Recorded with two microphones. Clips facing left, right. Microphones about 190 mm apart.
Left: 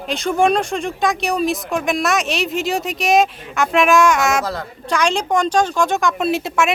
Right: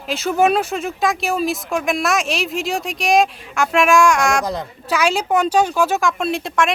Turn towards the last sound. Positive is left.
turn(degrees=5)  # may be behind; listen again after turning